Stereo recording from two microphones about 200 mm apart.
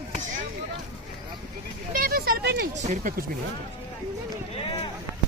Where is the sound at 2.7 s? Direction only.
40° right (ahead or behind).